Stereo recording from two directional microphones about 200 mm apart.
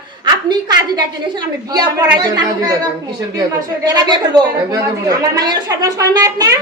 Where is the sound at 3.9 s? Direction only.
20° right (ahead or behind).